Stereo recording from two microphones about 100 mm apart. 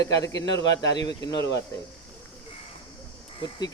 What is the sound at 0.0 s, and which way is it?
Speech, 35° left (ahead or behind).